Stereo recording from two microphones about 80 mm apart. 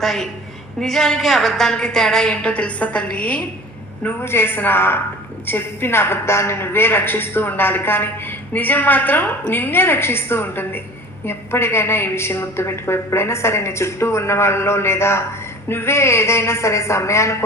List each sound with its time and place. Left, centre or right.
0.0 s a woman's voice: centre
4.0 s a woman's voice: left